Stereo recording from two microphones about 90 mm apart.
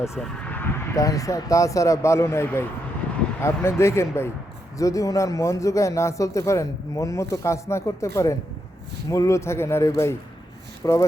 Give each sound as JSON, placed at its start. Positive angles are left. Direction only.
{"t": 0.2, "sound": "vehicle", "side_deg": 10}
{"t": 1.0, "sound": "a man's voice", "side_deg": 40}